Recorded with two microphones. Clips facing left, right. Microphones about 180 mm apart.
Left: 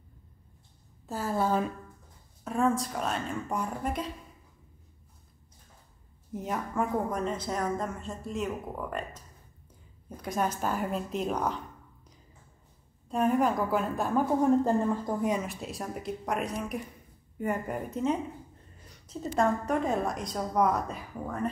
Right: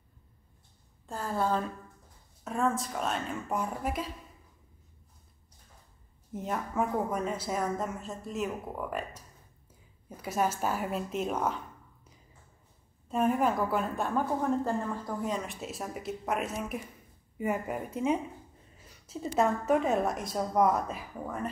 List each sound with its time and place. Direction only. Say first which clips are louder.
1.0 s a woman's voice: left 2 dB; 5° left (ahead or behind)
2.4 s a woman's voice: left 3 dB; centre (ahead or behind)
6.3 s a woman's voice: even; centre (ahead or behind)
13.1 s a woman's voice: left 1 dB; centre (ahead or behind)
14.4 s a woman's voice: left 6 dB; 15° left (ahead or behind)
15.4 s a woman's voice: left 1 dB; centre (ahead or behind)